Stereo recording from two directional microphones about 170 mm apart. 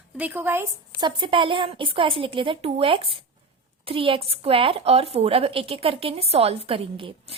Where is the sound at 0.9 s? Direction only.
25° right (ahead or behind).